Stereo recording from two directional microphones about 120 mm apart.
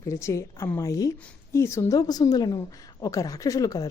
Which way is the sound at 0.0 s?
25° left (ahead or behind).